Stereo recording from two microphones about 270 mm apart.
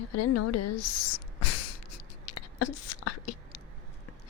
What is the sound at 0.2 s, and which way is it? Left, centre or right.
Speech, left.